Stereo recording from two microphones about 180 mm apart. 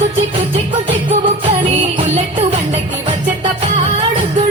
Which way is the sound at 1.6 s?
35° right (ahead or behind).